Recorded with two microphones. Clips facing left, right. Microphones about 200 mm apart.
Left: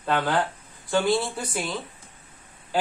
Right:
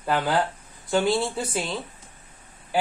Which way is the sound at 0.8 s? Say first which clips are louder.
Right 1 dB; 20° right (ahead or behind).